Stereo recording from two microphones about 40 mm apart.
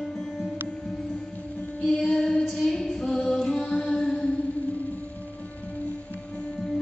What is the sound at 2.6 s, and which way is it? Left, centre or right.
Music, centre.